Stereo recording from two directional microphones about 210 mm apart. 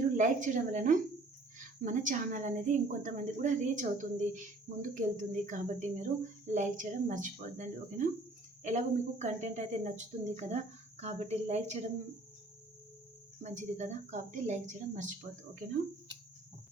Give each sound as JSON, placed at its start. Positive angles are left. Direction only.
{"t": 0.2, "sound": "speech", "side_deg": -35}
{"t": 13.4, "sound": "speech", "side_deg": -35}